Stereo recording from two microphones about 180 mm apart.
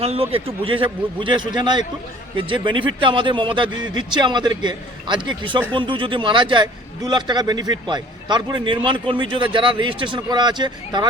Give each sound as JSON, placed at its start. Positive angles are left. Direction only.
{"t": 0.0, "sound": "a man's voice", "side_deg": -35}